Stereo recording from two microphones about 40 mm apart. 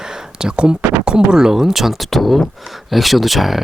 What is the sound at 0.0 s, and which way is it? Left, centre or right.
Speech, centre.